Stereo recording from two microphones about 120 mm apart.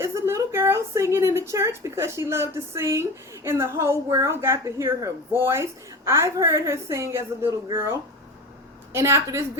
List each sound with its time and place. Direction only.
0.0 s speech: 20° right (ahead or behind)